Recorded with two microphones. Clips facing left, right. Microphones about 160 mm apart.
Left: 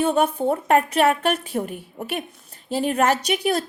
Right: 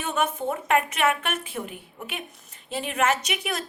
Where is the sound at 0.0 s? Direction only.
35° left (ahead or behind).